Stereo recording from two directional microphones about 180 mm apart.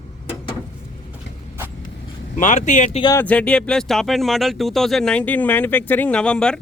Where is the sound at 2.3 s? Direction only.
40° left (ahead or behind).